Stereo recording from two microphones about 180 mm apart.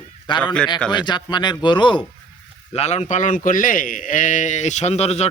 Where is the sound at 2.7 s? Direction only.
35° left (ahead or behind).